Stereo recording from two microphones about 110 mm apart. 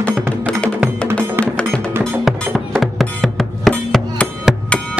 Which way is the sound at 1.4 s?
10° left (ahead or behind).